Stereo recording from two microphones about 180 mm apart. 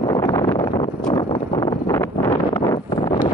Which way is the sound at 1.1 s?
25° left (ahead or behind).